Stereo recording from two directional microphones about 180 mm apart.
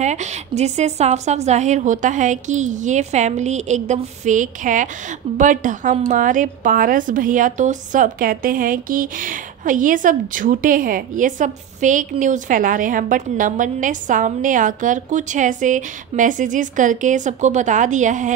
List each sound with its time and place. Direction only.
0.0 s a woman's voice: 40° right (ahead or behind)